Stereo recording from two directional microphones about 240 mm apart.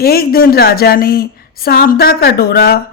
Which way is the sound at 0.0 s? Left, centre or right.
Left.